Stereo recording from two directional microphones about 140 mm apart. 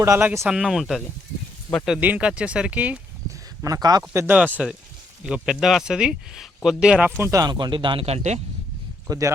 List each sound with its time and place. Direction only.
0.0 s speech: 20° right (ahead or behind)
3.6 s a man's voice: 25° right (ahead or behind)
4.6 s speech: 5° right (ahead or behind)
7.2 s speech: 20° right (ahead or behind); by 8.4 s 50° right (ahead or behind)
9.0 s speech: 25° right (ahead or behind)